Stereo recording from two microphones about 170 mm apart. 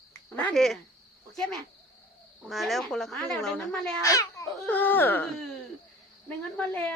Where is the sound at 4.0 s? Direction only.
20° left (ahead or behind).